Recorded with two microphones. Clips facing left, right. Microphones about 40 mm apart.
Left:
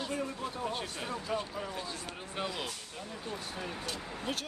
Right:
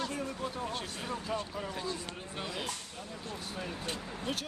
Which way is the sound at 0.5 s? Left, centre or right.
Centre.